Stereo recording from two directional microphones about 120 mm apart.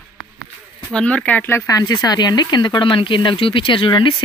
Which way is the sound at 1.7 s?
30° left (ahead or behind).